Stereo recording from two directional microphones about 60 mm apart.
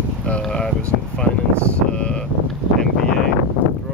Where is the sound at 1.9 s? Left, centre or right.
Centre.